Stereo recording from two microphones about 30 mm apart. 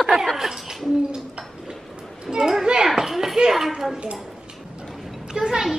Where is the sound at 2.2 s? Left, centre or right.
Right.